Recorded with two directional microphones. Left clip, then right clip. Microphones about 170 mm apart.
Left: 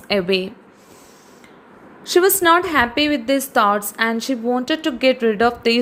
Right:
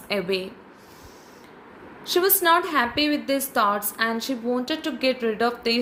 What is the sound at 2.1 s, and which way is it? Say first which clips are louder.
A woman's voice: left 6 dB; 50° left (ahead or behind).